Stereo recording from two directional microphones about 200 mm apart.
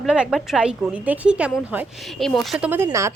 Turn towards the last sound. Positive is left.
turn(degrees=-15)  # may be behind; listen again after turning